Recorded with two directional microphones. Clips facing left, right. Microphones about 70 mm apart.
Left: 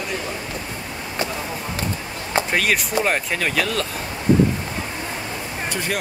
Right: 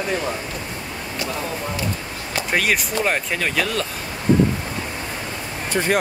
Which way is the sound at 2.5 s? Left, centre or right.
Centre.